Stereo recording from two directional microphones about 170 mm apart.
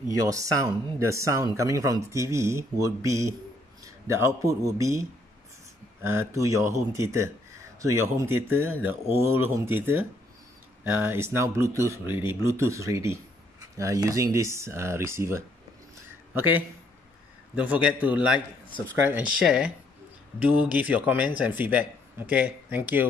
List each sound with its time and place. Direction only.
0.2 s speech: 20° right (ahead or behind)
6.0 s speech: 15° right (ahead or behind)